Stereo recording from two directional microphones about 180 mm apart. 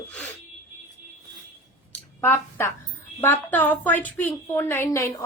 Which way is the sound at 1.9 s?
10° left (ahead or behind).